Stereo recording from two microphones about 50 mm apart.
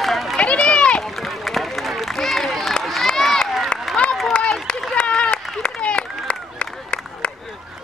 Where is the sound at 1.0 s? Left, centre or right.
Centre.